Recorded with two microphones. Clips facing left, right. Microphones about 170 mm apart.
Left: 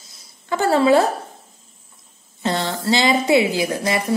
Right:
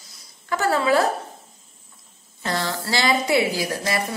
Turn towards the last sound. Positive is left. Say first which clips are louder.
# left 4 dB
turn(degrees=20)  # may be behind; listen again after turning